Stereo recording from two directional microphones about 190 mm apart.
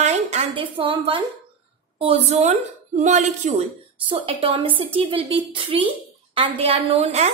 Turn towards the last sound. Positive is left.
turn(degrees=-35)  # may be behind; listen again after turning